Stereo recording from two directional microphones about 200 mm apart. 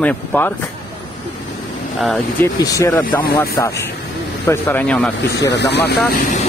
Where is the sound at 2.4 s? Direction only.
15° left (ahead or behind).